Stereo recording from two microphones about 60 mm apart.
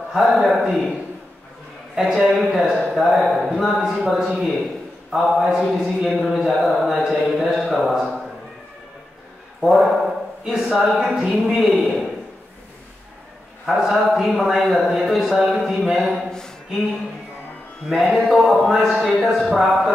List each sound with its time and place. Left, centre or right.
0.1 s speech: centre
2.0 s a man's voice: centre
9.6 s a sound: centre
11.1 s a man's voice: centre
13.7 s speech: centre
16.3 s a sound: centre
17.8 s speech: centre